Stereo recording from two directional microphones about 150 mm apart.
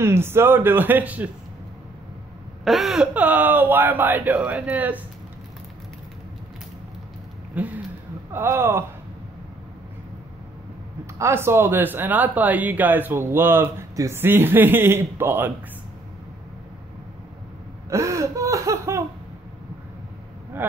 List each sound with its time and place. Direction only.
0.0 s speech: 15° right (ahead or behind)
2.6 s speech: centre (ahead or behind)
7.5 s a sound: 10° right (ahead or behind)
8.3 s speech: 15° right (ahead or behind)
11.1 s speech: 15° right (ahead or behind)
17.8 s a sound: 20° right (ahead or behind)